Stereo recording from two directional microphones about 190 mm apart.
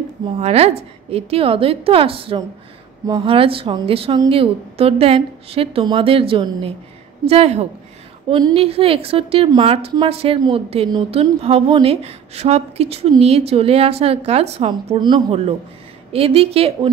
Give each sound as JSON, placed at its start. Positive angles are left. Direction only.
{"t": 0.4, "sound": "a woman's voice", "side_deg": -35}